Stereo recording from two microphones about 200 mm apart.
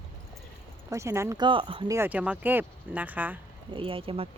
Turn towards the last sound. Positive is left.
turn(degrees=-30)  # may be behind; listen again after turning